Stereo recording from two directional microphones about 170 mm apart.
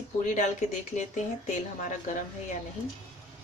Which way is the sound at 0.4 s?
45° left (ahead or behind).